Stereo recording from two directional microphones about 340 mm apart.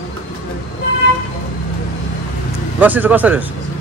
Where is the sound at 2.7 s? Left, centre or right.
Centre.